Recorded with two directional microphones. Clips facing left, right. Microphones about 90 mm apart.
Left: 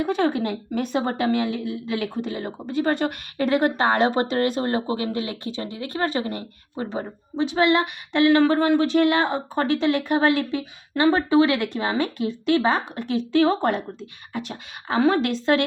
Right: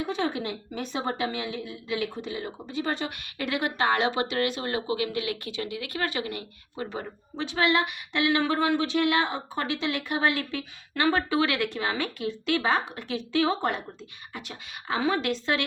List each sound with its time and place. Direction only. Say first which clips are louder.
0.0 s a woman's voice: left 7 dB; 55° left (ahead or behind)
3.3 s speech: left 8 dB; 35° left (ahead or behind)
10.5 s speech: left 7 dB; 25° left (ahead or behind)
13.3 s a woman's voice: left 6 dB; 45° left (ahead or behind)